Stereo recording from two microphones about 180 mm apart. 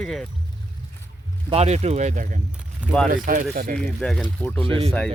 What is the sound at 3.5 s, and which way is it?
Speech, 55° right (ahead or behind).